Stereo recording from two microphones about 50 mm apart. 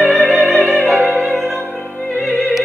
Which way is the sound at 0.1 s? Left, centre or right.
Centre.